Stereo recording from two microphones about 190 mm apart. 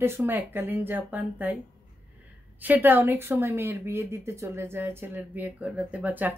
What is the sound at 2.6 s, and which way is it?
Speech, 10° right (ahead or behind).